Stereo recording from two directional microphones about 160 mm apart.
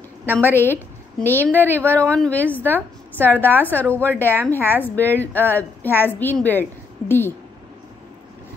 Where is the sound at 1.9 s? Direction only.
10° left (ahead or behind).